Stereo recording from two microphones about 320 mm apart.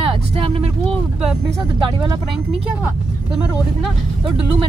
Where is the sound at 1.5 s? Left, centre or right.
Centre.